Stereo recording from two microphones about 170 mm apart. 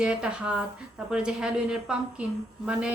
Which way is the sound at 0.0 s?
5° right (ahead or behind).